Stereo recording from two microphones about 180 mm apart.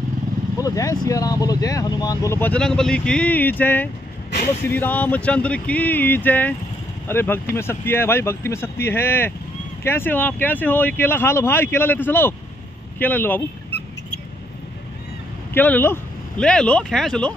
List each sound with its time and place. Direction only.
0.6 s speech: 20° left (ahead or behind)
15.5 s speech: 10° left (ahead or behind)